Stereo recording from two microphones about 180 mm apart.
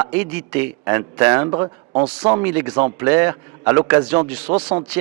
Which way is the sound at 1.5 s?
25° right (ahead or behind).